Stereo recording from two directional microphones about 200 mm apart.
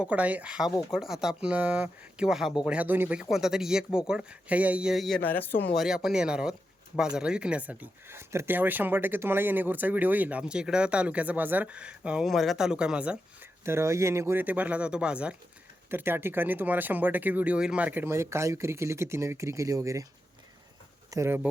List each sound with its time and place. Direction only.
0.0 s speech: 5° right (ahead or behind)
21.1 s speech: 15° right (ahead or behind)